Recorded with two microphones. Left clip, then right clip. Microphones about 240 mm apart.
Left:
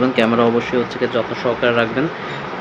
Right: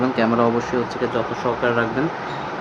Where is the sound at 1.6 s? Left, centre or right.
Centre.